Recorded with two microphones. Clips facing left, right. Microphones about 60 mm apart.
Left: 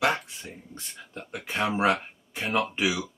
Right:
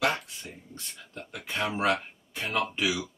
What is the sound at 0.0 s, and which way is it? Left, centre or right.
Speech, left.